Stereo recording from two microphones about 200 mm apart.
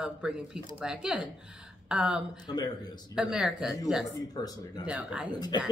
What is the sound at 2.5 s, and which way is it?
Speech, 20° left (ahead or behind).